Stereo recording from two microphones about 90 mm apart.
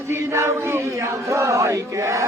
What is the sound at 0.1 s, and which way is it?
Chant, 30° right (ahead or behind).